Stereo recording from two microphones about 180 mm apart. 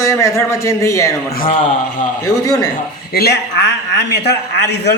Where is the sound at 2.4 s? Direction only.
20° left (ahead or behind).